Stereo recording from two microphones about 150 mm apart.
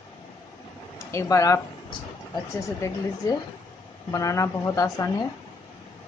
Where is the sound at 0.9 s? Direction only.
20° left (ahead or behind).